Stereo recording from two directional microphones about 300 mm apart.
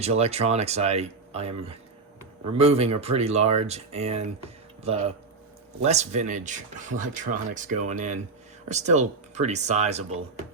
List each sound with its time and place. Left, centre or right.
0.0 s speech: right